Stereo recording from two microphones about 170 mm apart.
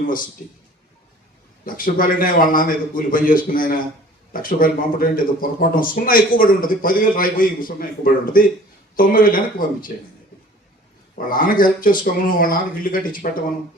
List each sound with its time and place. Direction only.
1.6 s speech: 55° left (ahead or behind)
11.1 s speech: 55° left (ahead or behind)